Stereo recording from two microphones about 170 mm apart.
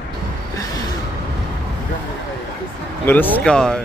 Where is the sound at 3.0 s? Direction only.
10° left (ahead or behind).